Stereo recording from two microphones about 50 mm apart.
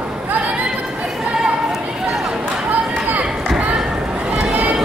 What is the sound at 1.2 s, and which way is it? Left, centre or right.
Chatter, centre.